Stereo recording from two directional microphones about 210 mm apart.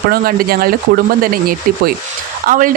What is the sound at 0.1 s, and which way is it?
A man's voice, 45° right (ahead or behind).